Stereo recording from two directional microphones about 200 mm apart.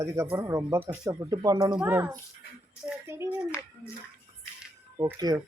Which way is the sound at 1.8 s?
10° right (ahead or behind).